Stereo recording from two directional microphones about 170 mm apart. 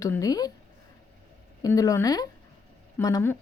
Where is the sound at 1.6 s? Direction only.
20° left (ahead or behind).